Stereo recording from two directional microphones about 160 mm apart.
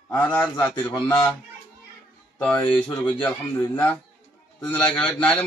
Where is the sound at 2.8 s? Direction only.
30° left (ahead or behind).